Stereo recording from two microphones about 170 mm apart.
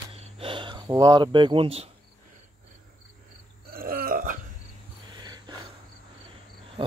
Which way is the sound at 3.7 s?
60° right (ahead or behind).